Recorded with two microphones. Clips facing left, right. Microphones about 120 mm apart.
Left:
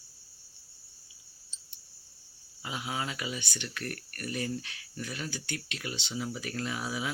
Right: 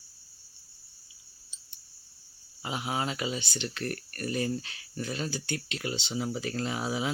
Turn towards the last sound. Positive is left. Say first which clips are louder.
# right 3 dB
turn(degrees=-25)  # may be behind; listen again after turning